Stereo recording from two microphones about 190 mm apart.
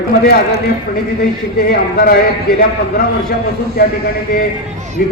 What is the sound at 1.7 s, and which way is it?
Speech, 50° left (ahead or behind).